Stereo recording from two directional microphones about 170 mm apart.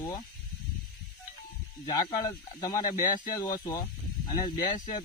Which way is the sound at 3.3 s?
20° left (ahead or behind).